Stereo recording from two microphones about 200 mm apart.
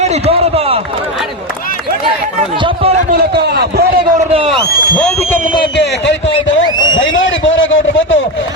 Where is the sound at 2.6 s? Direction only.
25° right (ahead or behind).